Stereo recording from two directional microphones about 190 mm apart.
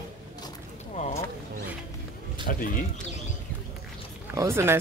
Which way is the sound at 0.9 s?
35° left (ahead or behind).